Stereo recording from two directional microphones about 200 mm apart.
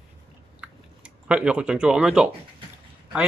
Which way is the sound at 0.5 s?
5° right (ahead or behind).